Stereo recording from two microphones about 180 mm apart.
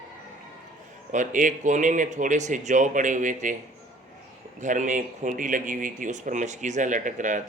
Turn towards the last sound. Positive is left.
turn(degrees=-45)  # may be behind; listen again after turning